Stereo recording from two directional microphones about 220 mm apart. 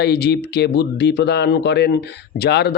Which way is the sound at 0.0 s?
45° left (ahead or behind).